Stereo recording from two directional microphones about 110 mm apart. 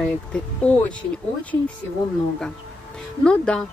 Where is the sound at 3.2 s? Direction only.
10° left (ahead or behind).